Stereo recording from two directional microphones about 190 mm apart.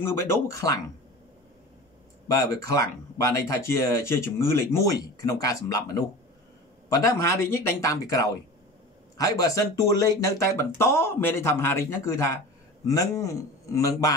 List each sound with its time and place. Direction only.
0.0 s speech: 15° left (ahead or behind)
2.3 s speech: 15° left (ahead or behind)